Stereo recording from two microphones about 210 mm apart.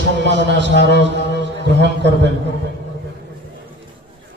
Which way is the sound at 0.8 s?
55° right (ahead or behind).